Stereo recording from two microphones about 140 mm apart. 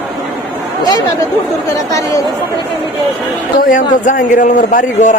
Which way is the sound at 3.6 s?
70° left (ahead or behind).